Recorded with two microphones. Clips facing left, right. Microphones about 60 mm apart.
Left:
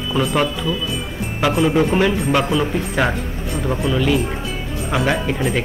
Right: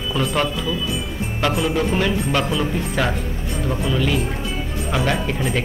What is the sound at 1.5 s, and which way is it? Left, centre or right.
Speech, left.